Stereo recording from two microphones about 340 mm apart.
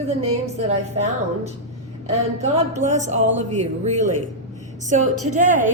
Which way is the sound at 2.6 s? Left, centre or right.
Centre.